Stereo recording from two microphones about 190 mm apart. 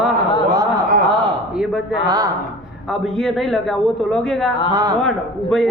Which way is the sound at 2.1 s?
20° right (ahead or behind).